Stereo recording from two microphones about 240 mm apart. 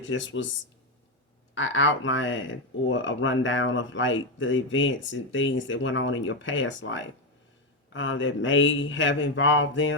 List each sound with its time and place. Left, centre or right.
0.0 s speech: left
1.5 s speech: left